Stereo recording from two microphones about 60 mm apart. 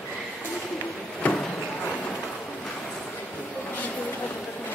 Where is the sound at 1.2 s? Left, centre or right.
Left.